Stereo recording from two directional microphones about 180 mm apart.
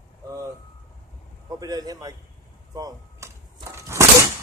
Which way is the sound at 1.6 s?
20° right (ahead or behind).